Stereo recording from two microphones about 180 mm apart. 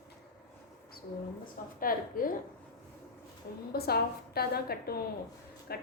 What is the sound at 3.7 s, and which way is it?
A woman's voice, 60° left (ahead or behind).